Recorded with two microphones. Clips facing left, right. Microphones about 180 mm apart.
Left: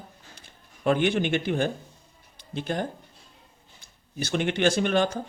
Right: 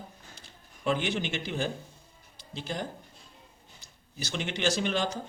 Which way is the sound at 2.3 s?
55° left (ahead or behind).